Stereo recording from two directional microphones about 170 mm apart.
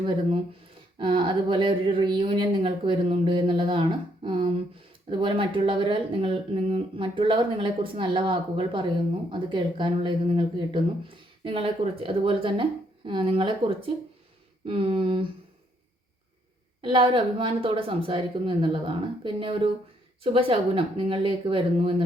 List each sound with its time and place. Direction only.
0.0 s speech: 30° right (ahead or behind)
16.8 s speech: 30° right (ahead or behind)